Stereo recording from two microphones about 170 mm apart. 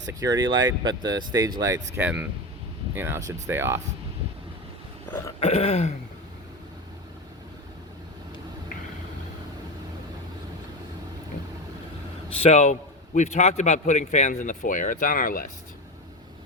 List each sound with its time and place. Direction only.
0.0 s speech: 20° right (ahead or behind)
5.4 s throat clearing: 35° left (ahead or behind)
12.3 s throat clearing: 40° left (ahead or behind)
13.1 s speech: 40° left (ahead or behind)